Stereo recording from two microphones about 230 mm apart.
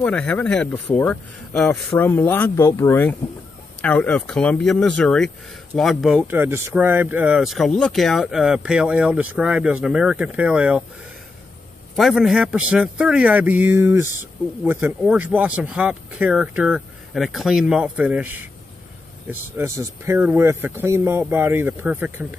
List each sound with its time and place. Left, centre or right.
0.0 s speech: centre
11.9 s speech: centre
19.5 s speech: centre